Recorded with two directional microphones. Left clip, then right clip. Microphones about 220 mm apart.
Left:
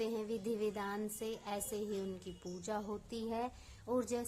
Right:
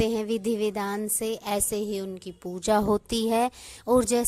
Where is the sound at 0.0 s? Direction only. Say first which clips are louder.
Right 13 dB; 40° right (ahead or behind).